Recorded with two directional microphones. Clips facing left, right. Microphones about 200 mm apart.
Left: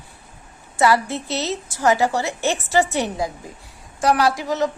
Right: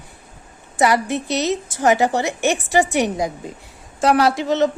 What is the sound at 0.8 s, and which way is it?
A woman's voice, 15° right (ahead or behind).